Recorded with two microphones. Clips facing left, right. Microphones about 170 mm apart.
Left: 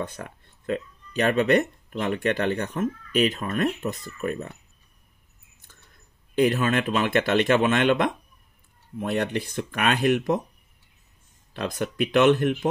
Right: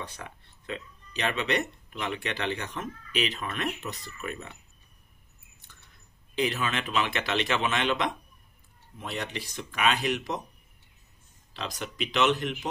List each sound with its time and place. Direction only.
0.0 s speech: 50° left (ahead or behind)
6.3 s speech: 50° left (ahead or behind)
11.5 s speech: 55° left (ahead or behind)